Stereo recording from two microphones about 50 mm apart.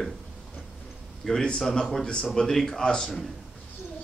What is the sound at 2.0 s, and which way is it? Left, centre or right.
Speech, centre.